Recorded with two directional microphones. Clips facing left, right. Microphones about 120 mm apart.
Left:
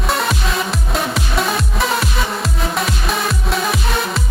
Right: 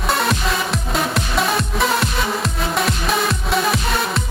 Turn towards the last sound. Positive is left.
turn(degrees=0)  # may be behind; listen again after turning